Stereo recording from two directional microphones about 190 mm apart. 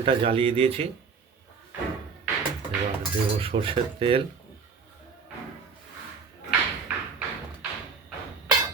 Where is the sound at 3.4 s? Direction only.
30° right (ahead or behind).